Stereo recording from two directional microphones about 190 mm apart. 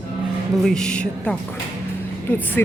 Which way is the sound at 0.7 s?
5° left (ahead or behind).